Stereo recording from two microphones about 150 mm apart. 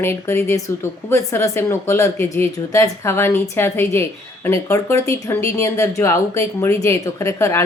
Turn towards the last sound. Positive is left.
turn(degrees=20)  # may be behind; listen again after turning